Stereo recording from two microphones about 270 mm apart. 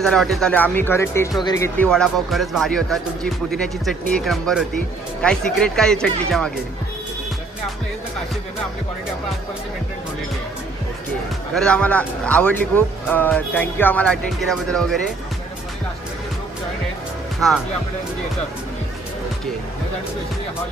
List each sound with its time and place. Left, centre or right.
0.0 s speech: centre
11.5 s speech: centre